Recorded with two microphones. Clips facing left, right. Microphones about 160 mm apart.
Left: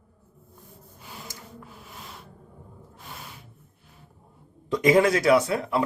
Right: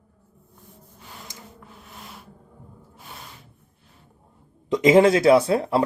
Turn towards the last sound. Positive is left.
turn(degrees=-30)  # may be behind; listen again after turning